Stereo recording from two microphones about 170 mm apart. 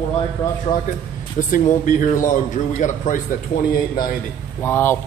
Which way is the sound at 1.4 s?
50° left (ahead or behind).